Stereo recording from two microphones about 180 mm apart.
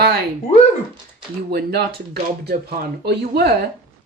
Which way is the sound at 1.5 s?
60° right (ahead or behind).